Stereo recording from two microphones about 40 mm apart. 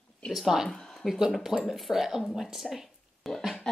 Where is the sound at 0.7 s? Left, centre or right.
Centre.